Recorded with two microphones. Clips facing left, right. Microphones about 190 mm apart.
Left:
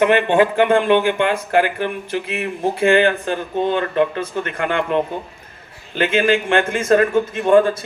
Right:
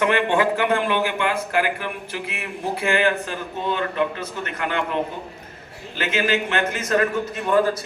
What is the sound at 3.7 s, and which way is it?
Speech, 55° left (ahead or behind).